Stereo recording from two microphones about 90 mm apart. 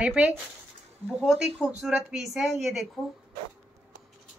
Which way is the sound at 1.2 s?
5° right (ahead or behind).